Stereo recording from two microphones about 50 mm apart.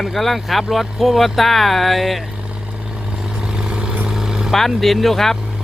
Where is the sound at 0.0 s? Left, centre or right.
Centre.